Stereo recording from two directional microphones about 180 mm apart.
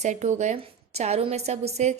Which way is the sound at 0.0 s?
40° right (ahead or behind).